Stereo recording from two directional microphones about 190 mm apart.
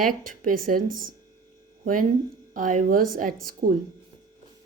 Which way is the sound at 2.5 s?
45° right (ahead or behind).